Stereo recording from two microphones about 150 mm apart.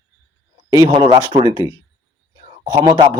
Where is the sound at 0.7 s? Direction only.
25° right (ahead or behind).